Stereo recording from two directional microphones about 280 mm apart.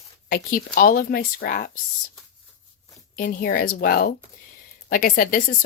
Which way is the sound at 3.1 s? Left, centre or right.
Left.